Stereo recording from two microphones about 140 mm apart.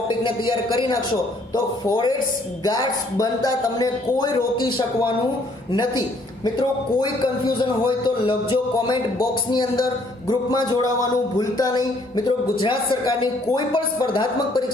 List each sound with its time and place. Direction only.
0.2 s speech: 35° left (ahead or behind)
10.2 s speech: 30° left (ahead or behind)